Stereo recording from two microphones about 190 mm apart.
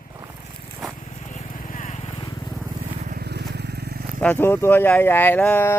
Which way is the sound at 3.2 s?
60° right (ahead or behind).